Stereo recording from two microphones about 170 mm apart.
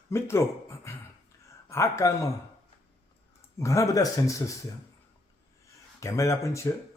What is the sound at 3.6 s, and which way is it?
Speech, 20° left (ahead or behind).